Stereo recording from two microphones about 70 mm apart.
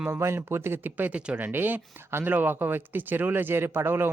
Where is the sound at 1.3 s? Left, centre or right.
Right.